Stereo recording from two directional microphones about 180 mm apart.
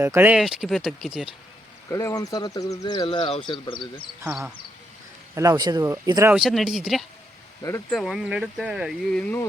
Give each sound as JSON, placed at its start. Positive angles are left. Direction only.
{"t": 0.0, "sound": "speech", "side_deg": -10}
{"t": 1.9, "sound": "speech", "side_deg": 15}
{"t": 5.3, "sound": "speech", "side_deg": -20}
{"t": 6.3, "sound": "speech", "side_deg": 0}